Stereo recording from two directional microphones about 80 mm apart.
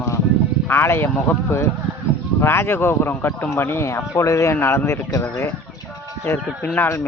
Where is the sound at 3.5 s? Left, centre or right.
Left.